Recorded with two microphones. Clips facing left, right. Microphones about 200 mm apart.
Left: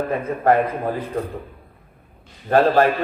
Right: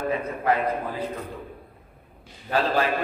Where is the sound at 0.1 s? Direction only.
50° left (ahead or behind).